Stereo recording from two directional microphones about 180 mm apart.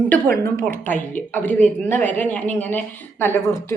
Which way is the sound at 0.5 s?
50° right (ahead or behind).